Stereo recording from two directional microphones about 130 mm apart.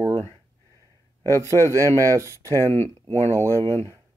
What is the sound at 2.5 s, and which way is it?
Speech, 20° left (ahead or behind).